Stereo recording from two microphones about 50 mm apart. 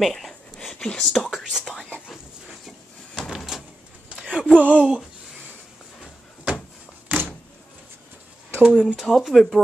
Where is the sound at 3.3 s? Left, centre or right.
Centre.